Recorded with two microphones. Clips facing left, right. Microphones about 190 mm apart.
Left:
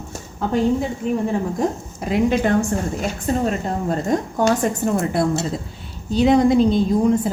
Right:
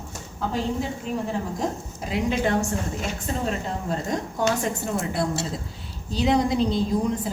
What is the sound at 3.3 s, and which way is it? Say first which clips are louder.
A woman's voice: left 7 dB; 45° left (ahead or behind).